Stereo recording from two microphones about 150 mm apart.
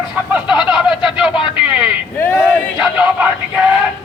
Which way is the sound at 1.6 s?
5° right (ahead or behind).